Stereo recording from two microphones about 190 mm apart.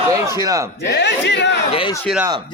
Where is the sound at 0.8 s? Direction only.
65° left (ahead or behind).